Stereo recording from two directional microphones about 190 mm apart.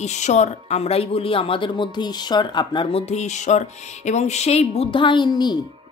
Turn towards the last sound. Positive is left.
turn(degrees=20)  # may be behind; listen again after turning